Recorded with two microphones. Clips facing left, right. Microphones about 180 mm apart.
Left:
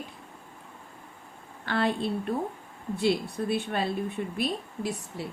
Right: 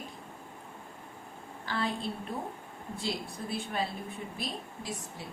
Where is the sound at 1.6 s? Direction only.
65° left (ahead or behind).